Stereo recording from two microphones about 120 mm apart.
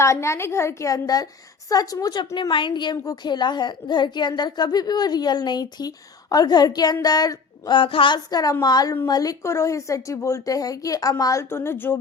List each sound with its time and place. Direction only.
0.0 s a woman's voice: 25° left (ahead or behind)